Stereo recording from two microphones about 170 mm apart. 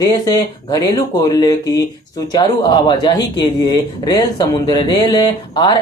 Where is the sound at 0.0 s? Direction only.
20° left (ahead or behind).